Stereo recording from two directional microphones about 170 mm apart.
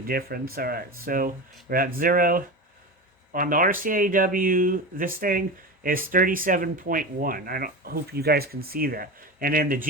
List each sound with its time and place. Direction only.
0.1 s speech: 65° right (ahead or behind)